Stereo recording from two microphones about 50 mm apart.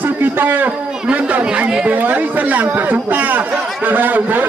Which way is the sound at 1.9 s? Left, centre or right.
Right.